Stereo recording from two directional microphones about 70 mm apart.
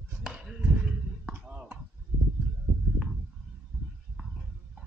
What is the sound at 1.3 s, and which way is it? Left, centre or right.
Chop, centre.